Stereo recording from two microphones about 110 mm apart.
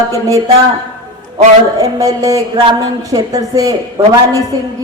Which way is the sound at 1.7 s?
35° right (ahead or behind).